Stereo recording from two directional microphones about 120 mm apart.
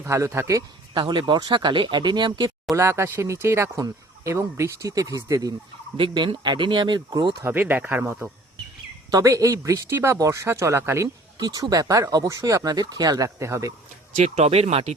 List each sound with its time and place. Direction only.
0.0 s speech: 25° right (ahead or behind)
0.9 s speech: 40° right (ahead or behind)
2.7 s speech: 20° right (ahead or behind)
6.0 s speech: 40° right (ahead or behind)
7.4 s speech: 15° right (ahead or behind)
9.0 s speech: 30° right (ahead or behind)
14.2 s speech: 55° right (ahead or behind)